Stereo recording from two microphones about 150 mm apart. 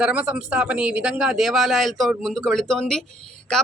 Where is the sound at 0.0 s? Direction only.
10° right (ahead or behind).